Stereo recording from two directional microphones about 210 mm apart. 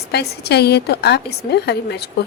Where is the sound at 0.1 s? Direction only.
50° left (ahead or behind).